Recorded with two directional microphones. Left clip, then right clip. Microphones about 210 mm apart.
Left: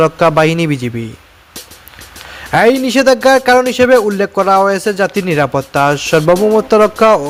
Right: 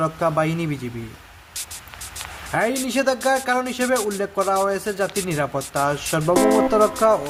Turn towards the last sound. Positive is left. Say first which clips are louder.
# left 9 dB
turn(degrees=40)  # may be behind; listen again after turning